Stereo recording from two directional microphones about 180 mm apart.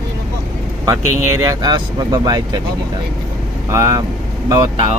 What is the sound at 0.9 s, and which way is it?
Speech, 20° right (ahead or behind).